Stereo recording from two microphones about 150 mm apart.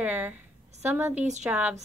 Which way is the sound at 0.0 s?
10° right (ahead or behind).